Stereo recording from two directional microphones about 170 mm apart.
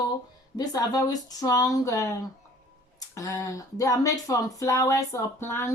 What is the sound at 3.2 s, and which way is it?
Speech, 20° left (ahead or behind).